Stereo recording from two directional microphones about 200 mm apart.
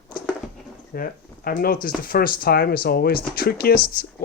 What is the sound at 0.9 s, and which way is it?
Speech, 45° left (ahead or behind).